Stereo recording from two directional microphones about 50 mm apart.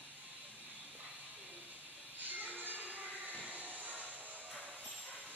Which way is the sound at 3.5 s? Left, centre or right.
Right.